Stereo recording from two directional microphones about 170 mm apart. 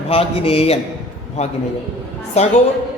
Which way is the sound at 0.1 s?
35° left (ahead or behind).